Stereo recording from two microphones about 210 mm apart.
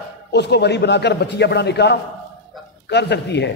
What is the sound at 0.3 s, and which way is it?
A man's voice, 50° left (ahead or behind).